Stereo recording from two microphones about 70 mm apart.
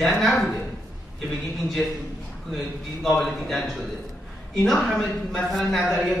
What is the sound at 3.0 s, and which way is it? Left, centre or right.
A man's voice, centre.